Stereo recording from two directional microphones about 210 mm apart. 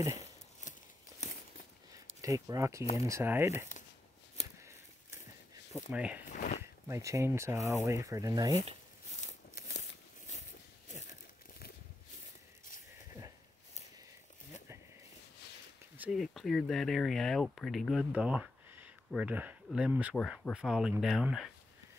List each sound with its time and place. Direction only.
0.1 s a sound: 35° left (ahead or behind)
2.2 s speech: 15° right (ahead or behind)
5.9 s speech: 5° right (ahead or behind)
6.2 s a sound: 35° left (ahead or behind)
6.6 s speech: 15° right (ahead or behind)
16.0 s speech: centre (ahead or behind)